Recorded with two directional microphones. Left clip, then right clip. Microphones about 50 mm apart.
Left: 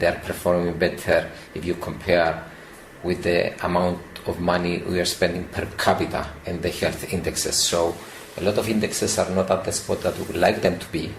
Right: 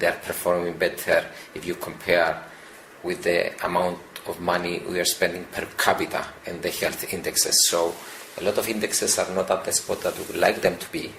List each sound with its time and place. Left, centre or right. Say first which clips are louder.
0.0 s speech: left 2 dB; right